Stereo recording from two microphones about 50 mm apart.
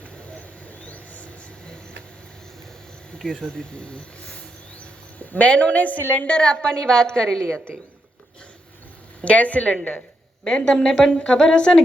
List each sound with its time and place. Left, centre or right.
0.2 s mouse: left
0.9 s a sound: left
3.2 s speech: centre
4.8 s cricket: left
6.1 s a woman's voice: left
9.2 s a woman's voice: left
10.4 s a woman's voice: centre